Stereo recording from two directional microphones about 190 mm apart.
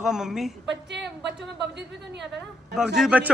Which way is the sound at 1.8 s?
65° right (ahead or behind).